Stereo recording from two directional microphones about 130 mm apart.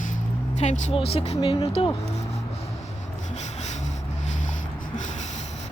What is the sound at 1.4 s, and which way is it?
Speech, 40° left (ahead or behind).